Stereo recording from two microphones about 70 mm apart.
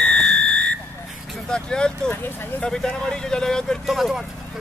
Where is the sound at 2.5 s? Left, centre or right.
Centre.